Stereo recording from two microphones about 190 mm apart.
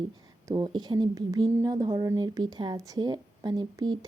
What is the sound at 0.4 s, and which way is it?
A woman's voice, 25° right (ahead or behind).